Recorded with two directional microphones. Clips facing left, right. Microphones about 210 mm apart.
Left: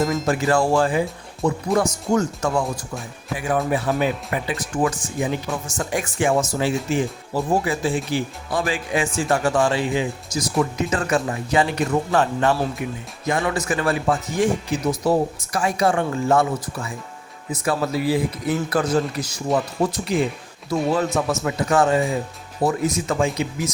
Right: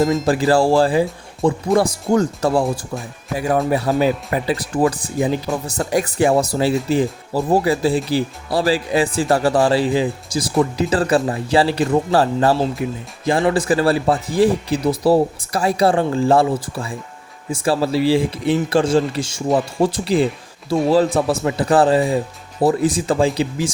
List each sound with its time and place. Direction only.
0.3 s speech: 35° right (ahead or behind)